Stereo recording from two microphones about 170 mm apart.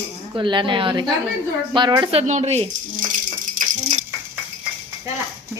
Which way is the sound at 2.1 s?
40° right (ahead or behind).